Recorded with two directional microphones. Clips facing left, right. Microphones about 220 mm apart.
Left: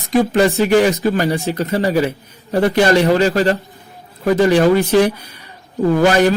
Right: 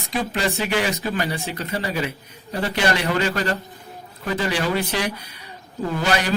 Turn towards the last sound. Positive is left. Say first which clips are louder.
# left 10 dB
turn(degrees=45)  # may be behind; listen again after turning